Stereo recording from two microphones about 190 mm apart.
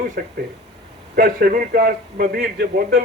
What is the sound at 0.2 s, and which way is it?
A man's voice, 50° right (ahead or behind).